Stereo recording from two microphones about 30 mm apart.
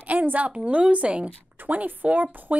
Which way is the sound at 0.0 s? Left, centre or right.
Right.